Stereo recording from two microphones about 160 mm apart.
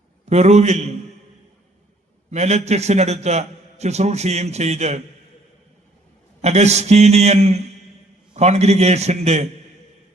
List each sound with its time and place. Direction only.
0.3 s a man's voice: 45° right (ahead or behind)
2.3 s a man's voice: 45° right (ahead or behind)
6.4 s a man's voice: 45° right (ahead or behind)